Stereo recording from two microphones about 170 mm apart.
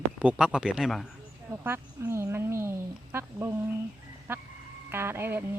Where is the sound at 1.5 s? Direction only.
15° right (ahead or behind).